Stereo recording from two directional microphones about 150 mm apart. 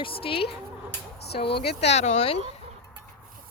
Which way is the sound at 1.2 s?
90° left.